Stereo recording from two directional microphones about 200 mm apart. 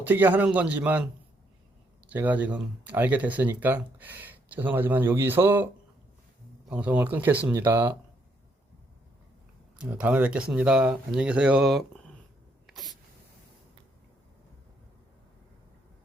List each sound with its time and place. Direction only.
0.0 s speech: 10° right (ahead or behind)
2.0 s speech: 10° right (ahead or behind)
6.7 s speech: 5° right (ahead or behind)
9.7 s speech: 5° right (ahead or behind)
12.6 s a sound: centre (ahead or behind)